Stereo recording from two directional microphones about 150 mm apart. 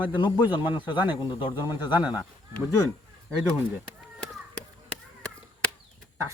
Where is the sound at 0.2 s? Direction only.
30° left (ahead or behind).